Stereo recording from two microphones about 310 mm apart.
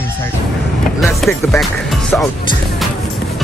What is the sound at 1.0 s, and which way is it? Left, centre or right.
Speech, centre.